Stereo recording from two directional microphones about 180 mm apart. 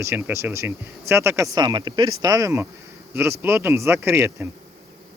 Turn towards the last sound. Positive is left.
turn(degrees=-15)  # may be behind; listen again after turning